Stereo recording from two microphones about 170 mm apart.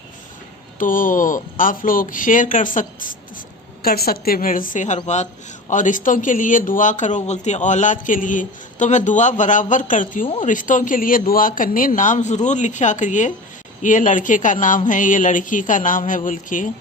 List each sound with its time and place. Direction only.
0.8 s speech: 55° left (ahead or behind)
3.8 s a woman's voice: 65° left (ahead or behind)